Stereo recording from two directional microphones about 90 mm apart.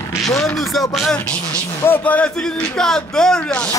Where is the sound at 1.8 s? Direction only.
20° left (ahead or behind).